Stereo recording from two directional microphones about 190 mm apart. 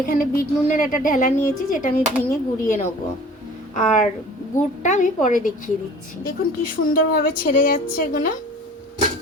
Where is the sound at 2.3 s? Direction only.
40° left (ahead or behind).